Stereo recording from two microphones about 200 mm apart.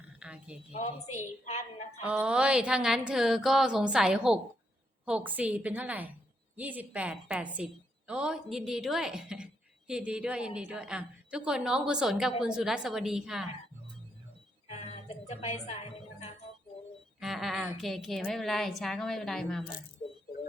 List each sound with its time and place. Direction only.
0.2 s speech: 5° right (ahead or behind)
2.0 s a woman's voice: 5° right (ahead or behind)
14.7 s a sound: 30° left (ahead or behind)
17.2 s a woman's voice: centre (ahead or behind)